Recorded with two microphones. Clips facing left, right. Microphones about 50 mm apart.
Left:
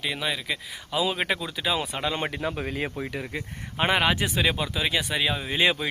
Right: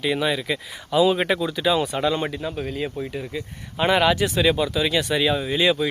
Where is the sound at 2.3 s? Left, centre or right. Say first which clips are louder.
Right 1 dB; left.